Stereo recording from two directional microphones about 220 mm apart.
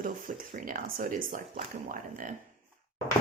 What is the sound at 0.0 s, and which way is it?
Speech, 35° right (ahead or behind).